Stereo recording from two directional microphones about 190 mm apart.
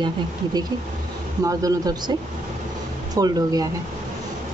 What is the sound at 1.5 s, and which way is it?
Speech, 20° right (ahead or behind).